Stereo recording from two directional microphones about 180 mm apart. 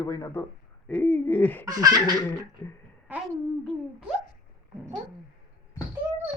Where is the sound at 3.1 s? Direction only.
10° right (ahead or behind).